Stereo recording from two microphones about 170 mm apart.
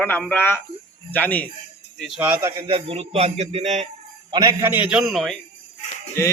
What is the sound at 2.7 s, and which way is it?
Speech, 35° right (ahead or behind).